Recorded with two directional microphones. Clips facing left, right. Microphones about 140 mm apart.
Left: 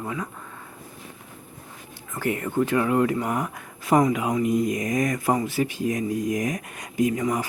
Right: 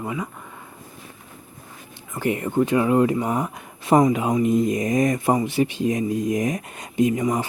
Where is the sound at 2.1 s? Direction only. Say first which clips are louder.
Right 3 dB; 20° right (ahead or behind).